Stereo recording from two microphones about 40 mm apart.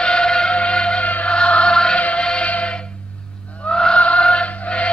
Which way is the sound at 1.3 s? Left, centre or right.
Left.